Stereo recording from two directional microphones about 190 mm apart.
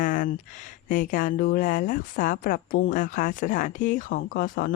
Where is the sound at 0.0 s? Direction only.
45° left (ahead or behind).